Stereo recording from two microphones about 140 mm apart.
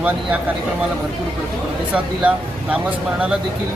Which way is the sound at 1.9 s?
10° right (ahead or behind).